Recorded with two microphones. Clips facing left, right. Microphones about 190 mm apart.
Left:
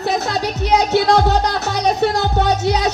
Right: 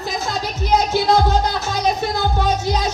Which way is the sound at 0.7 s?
70° left (ahead or behind).